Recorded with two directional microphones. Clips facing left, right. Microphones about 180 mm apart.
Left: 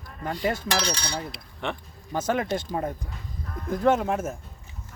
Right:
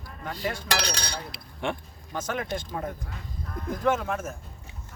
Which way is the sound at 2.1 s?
35° left (ahead or behind).